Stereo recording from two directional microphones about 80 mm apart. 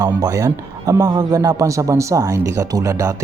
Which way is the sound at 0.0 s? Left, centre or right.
Right.